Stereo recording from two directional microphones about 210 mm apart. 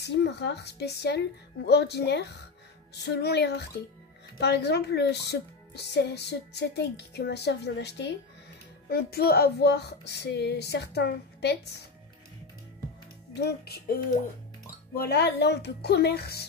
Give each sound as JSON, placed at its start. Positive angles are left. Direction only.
{"t": 0.0, "sound": "a woman's voice", "side_deg": 55}
{"t": 13.3, "sound": "a woman's voice", "side_deg": 50}
{"t": 15.0, "sound": "a woman's voice", "side_deg": 50}